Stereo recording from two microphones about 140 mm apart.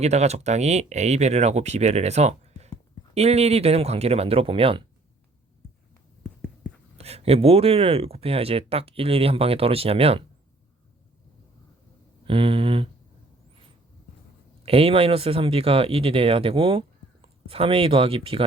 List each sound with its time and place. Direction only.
0.0 s speech: 50° right (ahead or behind)
6.2 s writing: 5° left (ahead or behind)
7.0 s speech: 45° right (ahead or behind)
12.2 s a sound: 40° right (ahead or behind)
14.6 s speech: 45° right (ahead or behind)